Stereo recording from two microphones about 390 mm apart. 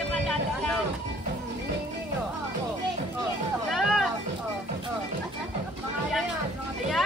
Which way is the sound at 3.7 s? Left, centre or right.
Centre.